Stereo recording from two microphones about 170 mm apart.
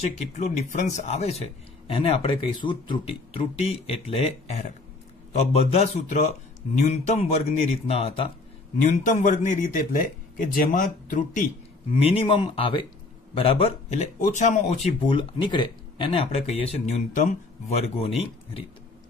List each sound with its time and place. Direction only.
0.4 s speech: 45° left (ahead or behind)
8.9 s speech: 50° left (ahead or behind)
11.9 s speech: 35° left (ahead or behind)